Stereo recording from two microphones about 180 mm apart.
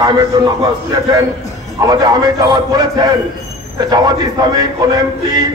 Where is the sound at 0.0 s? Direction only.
20° right (ahead or behind).